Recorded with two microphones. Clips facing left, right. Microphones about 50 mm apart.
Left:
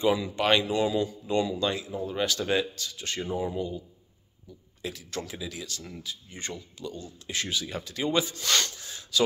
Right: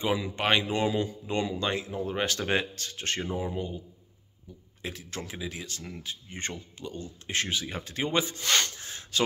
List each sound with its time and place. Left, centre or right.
0.0 s speech: right
3.3 s speech: centre
3.5 s speech: right